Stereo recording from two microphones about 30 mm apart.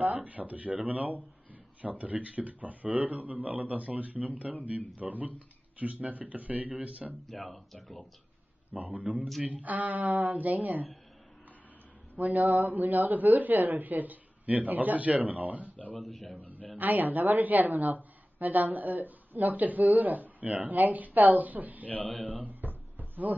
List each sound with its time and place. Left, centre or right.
0.0 s speech: right
7.3 s speech: left
8.7 s speech: right
12.2 s speech: right
15.7 s speech: left
16.7 s speech: right
21.8 s a man's voice: left
22.5 s a sound: right